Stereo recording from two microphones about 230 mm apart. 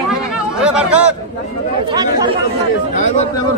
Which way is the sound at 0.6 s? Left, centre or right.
Centre.